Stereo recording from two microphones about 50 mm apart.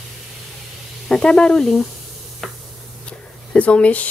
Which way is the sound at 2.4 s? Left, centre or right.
Centre.